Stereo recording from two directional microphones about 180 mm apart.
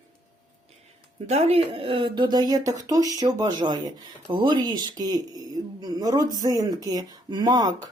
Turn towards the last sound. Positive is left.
turn(degrees=-20)  # may be behind; listen again after turning